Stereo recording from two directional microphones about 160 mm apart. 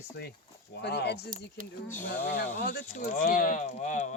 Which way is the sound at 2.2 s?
65° left (ahead or behind).